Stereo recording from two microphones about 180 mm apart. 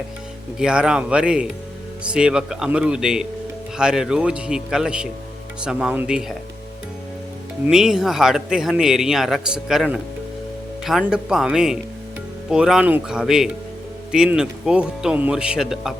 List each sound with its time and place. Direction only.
0.6 s speech: 5° right (ahead or behind)
7.7 s speech: 5° right (ahead or behind)